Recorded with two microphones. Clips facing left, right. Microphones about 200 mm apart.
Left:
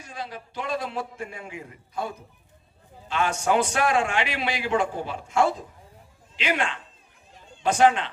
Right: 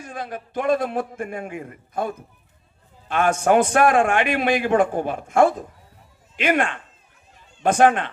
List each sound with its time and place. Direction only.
0.0 s a man's voice: 50° right (ahead or behind)